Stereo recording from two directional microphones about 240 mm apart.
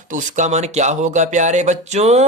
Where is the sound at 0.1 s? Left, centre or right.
Right.